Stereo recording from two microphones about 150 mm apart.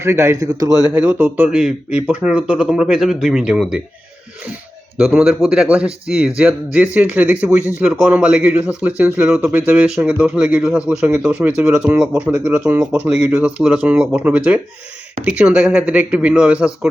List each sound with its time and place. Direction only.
0.0 s a man's voice: 20° right (ahead or behind)
0.9 s speech: 10° right (ahead or behind)
5.2 s speech: 5° right (ahead or behind)